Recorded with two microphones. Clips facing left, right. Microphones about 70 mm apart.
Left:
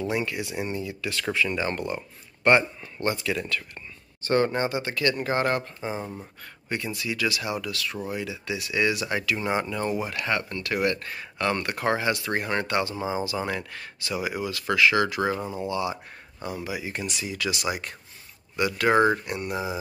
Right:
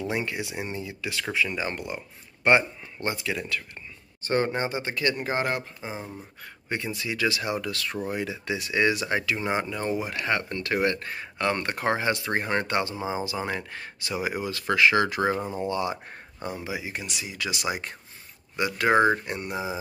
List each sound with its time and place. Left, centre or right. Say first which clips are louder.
0.1 s speech: left 1 dB; right; by 6.0 s centre
6.4 s speech: even; right
16.4 s speech: left 1 dB; right
16.9 s speech: left 3 dB; centre